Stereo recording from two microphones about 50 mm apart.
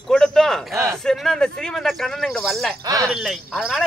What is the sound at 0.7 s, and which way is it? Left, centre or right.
Speech, right.